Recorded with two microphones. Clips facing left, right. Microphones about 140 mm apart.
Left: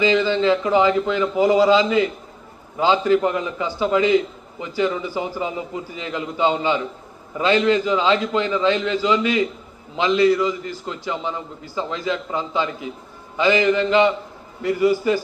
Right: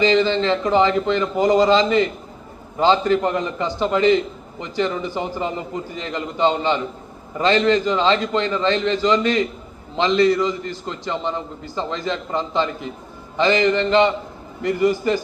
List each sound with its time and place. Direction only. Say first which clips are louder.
0.0 s a man's voice: right 1 dB; 10° left (ahead or behind)